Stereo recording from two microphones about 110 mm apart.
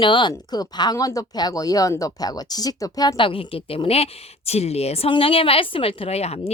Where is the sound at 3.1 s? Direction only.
50° left (ahead or behind); by 6.5 s 70° left (ahead or behind).